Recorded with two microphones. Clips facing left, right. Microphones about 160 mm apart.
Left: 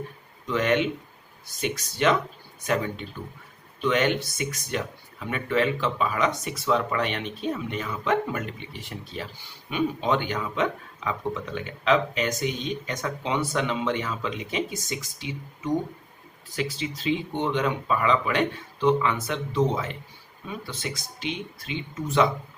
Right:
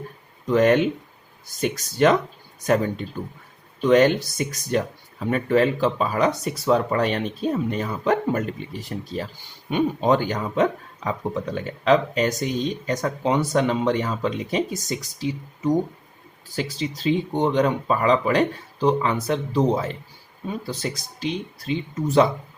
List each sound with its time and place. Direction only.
0.4 s speech: 40° right (ahead or behind)